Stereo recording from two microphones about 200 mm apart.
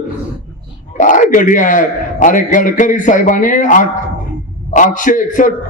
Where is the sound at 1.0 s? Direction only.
40° left (ahead or behind).